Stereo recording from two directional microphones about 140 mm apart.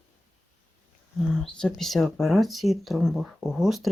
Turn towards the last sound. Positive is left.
turn(degrees=0)  # may be behind; listen again after turning